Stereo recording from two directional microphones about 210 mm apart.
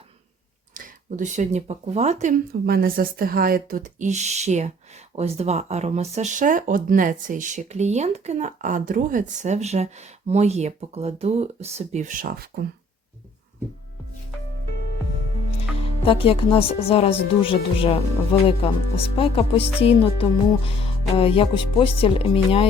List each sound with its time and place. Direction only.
0.7 s speech: 35° right (ahead or behind)
16.0 s speech: 25° left (ahead or behind)